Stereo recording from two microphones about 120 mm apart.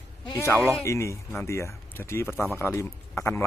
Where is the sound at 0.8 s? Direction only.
25° left (ahead or behind).